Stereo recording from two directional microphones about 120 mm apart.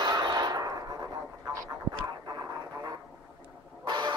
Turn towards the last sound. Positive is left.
turn(degrees=-40)  # may be behind; listen again after turning